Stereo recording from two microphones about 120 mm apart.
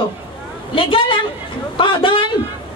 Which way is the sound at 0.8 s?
50° left (ahead or behind).